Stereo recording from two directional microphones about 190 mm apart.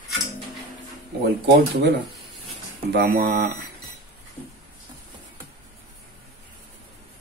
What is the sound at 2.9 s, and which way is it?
Speech, 60° right (ahead or behind).